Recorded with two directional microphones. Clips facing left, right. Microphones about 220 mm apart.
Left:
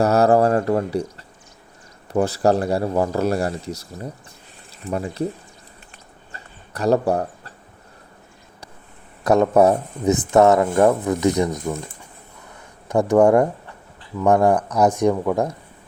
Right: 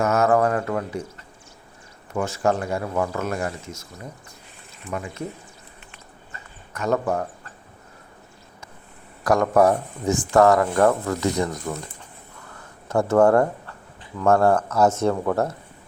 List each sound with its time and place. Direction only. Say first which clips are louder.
0.0 s speech: left 4 dB; 35° left (ahead or behind)
2.1 s speech: left 5 dB; 35° left (ahead or behind)
5.9 s a sound: left 1 dB; 35° left (ahead or behind)
9.2 s speech: left 3 dB; 25° left (ahead or behind)
12.9 s speech: left 2 dB; 15° left (ahead or behind)